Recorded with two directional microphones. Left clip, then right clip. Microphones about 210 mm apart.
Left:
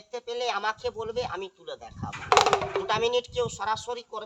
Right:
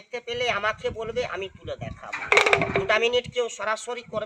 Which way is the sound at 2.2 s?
15° left (ahead or behind).